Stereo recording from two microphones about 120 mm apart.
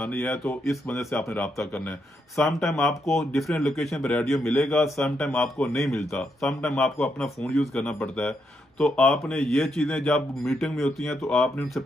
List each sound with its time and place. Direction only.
0.0 s speech: 15° left (ahead or behind)
2.3 s speech: 5° left (ahead or behind)